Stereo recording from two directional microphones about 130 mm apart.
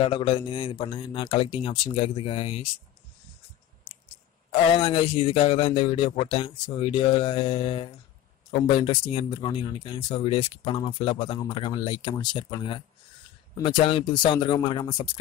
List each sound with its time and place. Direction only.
0.0 s speech: 40° left (ahead or behind)
4.5 s speech: 40° left (ahead or behind)